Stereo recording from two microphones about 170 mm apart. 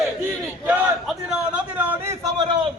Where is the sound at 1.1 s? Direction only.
5° right (ahead or behind).